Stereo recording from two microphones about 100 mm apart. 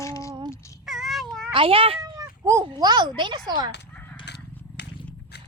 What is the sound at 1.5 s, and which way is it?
Speech, 65° right (ahead or behind).